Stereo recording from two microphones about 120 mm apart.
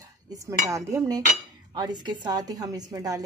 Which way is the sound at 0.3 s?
25° right (ahead or behind).